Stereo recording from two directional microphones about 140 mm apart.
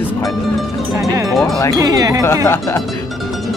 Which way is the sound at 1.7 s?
25° right (ahead or behind).